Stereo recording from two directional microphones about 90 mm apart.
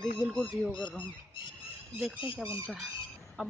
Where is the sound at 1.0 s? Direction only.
65° left (ahead or behind).